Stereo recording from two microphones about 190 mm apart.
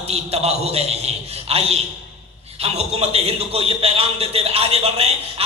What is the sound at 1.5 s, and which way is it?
A man's voice, 35° right (ahead or behind).